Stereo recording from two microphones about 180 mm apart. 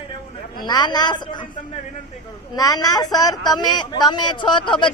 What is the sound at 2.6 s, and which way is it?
A man's voice, 20° left (ahead or behind).